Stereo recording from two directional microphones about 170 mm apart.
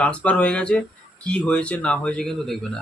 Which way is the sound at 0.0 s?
5° left (ahead or behind).